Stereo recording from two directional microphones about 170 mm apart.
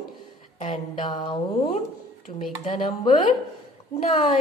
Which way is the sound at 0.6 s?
30° left (ahead or behind).